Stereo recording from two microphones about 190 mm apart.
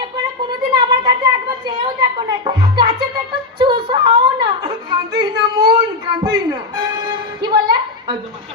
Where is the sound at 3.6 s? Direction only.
25° right (ahead or behind).